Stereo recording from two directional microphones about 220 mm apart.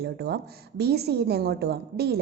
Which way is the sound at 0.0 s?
45° right (ahead or behind).